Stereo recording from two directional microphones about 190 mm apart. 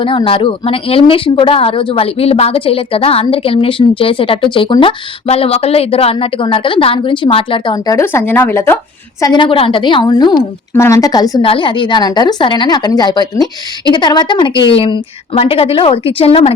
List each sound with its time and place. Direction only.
0.0 s a woman's voice: 25° left (ahead or behind)
9.2 s a woman's voice: 25° left (ahead or behind)